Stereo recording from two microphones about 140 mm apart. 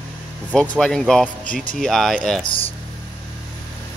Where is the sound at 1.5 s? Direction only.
75° left (ahead or behind).